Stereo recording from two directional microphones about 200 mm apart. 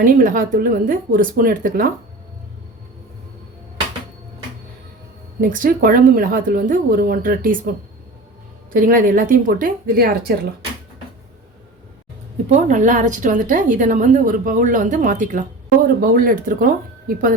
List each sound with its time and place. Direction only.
0.0 s speech: 45° right (ahead or behind)
5.4 s speech: 45° right (ahead or behind)
8.7 s speech: 45° right (ahead or behind)
12.5 s speech: 40° right (ahead or behind)